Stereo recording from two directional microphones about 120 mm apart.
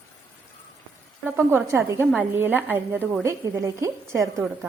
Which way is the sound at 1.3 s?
15° right (ahead or behind).